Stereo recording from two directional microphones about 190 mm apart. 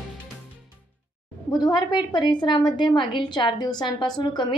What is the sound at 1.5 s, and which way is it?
A woman's voice, 25° left (ahead or behind).